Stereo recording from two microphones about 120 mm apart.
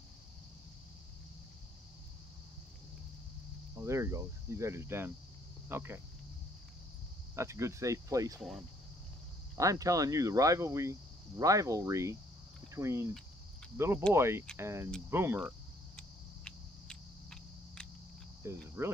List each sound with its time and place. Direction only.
3.7 s speech: 25° right (ahead or behind)
7.3 s speech: 25° right (ahead or behind)
8.4 s speech: 5° right (ahead or behind)
9.6 s speech: 30° right (ahead or behind)
14.1 s speech: 20° right (ahead or behind)
16.0 s a sound: 5° left (ahead or behind)
18.4 s cricket: 25° right (ahead or behind)